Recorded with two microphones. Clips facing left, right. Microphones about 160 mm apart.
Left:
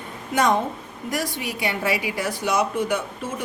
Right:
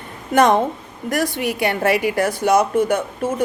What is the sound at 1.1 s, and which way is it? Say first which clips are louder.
A woman's voice: right 7 dB; 55° right (ahead or behind).